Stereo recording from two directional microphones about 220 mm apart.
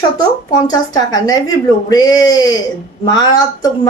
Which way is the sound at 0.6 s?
15° left (ahead or behind).